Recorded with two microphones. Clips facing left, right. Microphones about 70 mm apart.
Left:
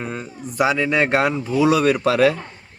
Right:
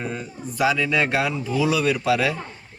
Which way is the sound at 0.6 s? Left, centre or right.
Left.